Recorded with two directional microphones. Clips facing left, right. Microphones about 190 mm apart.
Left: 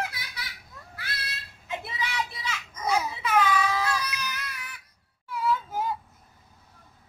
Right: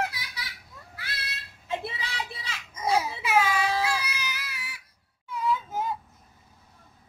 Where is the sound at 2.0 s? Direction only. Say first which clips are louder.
Left 4 dB; 30° right (ahead or behind).